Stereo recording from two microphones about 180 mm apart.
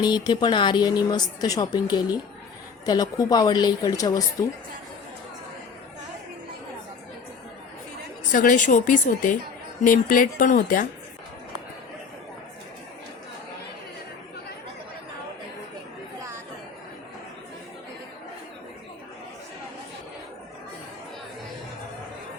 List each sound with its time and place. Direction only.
0.0 s speech: 25° left (ahead or behind)
8.3 s speech: 50° left (ahead or behind)